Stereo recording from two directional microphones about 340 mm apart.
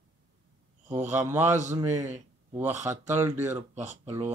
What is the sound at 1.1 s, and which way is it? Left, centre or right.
Speech, centre.